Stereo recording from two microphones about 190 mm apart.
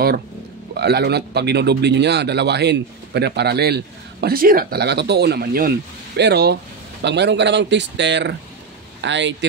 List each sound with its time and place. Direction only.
0.7 s speech: 60° right (ahead or behind)